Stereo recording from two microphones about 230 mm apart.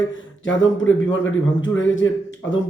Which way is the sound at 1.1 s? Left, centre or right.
Left.